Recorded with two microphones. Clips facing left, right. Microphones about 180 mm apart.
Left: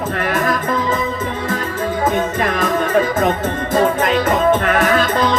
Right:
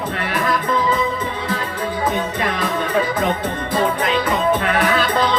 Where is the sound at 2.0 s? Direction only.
45° left (ahead or behind).